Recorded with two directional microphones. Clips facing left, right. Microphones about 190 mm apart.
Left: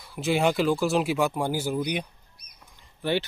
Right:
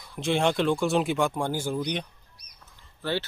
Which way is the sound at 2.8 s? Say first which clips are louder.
Left 3 dB; 15° left (ahead or behind).